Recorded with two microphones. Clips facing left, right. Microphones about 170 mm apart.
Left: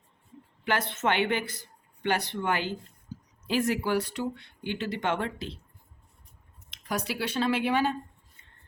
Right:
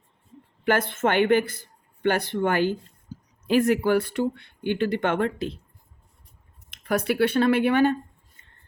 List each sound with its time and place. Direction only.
0.6 s speech: 50° right (ahead or behind)
6.7 s speech: 60° right (ahead or behind)